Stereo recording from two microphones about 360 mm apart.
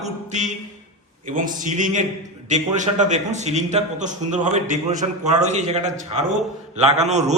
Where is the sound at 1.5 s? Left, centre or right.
Right.